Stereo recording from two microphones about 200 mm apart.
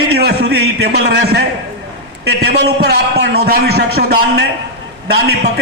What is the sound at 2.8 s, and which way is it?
Speech, 55° right (ahead or behind).